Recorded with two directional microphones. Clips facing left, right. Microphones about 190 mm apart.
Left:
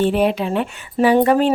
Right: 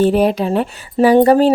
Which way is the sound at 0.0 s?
40° right (ahead or behind).